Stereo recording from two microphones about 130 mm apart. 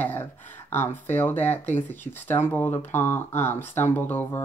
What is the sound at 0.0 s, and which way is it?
Speech, 15° left (ahead or behind).